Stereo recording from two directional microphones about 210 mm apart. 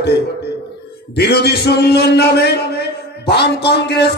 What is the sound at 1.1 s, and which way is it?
A man's voice, 50° left (ahead or behind).